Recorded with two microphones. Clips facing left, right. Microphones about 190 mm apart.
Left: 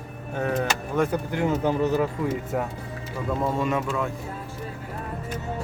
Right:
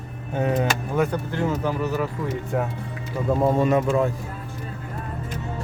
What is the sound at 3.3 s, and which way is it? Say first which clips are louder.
Speech: right 6 dB; 35° right (ahead or behind).